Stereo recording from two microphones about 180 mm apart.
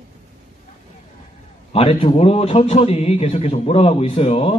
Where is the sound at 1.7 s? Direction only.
35° left (ahead or behind).